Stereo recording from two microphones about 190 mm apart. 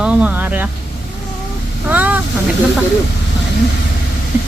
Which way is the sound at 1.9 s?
10° right (ahead or behind).